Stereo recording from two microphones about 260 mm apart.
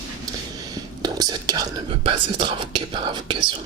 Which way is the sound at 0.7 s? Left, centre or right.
Centre.